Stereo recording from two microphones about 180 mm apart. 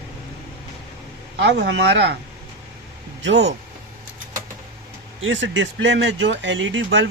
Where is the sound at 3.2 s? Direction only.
80° right.